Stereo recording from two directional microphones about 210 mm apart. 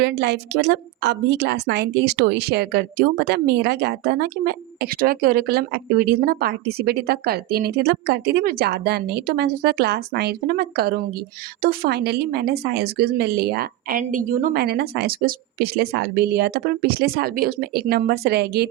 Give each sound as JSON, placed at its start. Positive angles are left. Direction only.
{"t": 0.0, "sound": "a woman's voice", "side_deg": -55}